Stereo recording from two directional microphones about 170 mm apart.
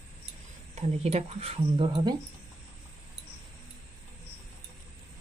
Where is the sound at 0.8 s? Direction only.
35° right (ahead or behind).